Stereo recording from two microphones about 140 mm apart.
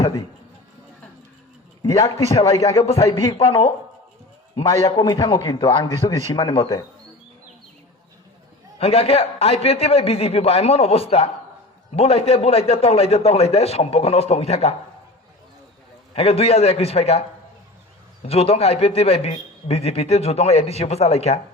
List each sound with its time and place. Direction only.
0.0 s speech: 25° left (ahead or behind)
1.8 s a man's voice: 25° left (ahead or behind)
3.3 s a man's voice: 45° left (ahead or behind)
4.5 s a man's voice: 25° left (ahead or behind)
8.8 s a man's voice: 45° left (ahead or behind)
16.1 s a man's voice: 45° left (ahead or behind)